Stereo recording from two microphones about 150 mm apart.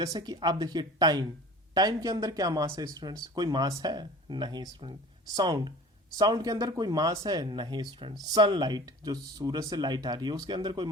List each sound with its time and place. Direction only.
0.0 s speech: 25° right (ahead or behind)